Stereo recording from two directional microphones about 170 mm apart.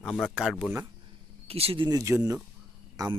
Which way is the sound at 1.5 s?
35° right (ahead or behind).